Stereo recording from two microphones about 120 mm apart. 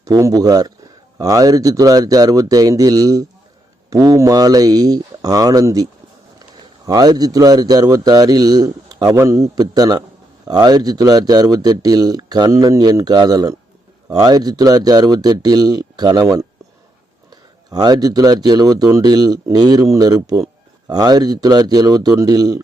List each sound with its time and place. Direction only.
0.0 s speech: 25° right (ahead or behind)
17.7 s speech: 35° right (ahead or behind)